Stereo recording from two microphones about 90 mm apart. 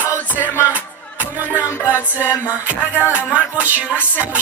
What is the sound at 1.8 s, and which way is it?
Music, 20° right (ahead or behind).